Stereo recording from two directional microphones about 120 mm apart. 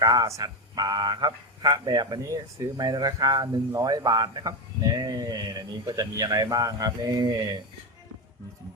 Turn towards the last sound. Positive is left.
turn(degrees=-35)  # may be behind; listen again after turning